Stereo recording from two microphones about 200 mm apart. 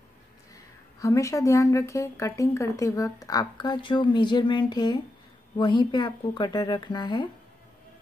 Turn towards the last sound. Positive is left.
turn(degrees=20)  # may be behind; listen again after turning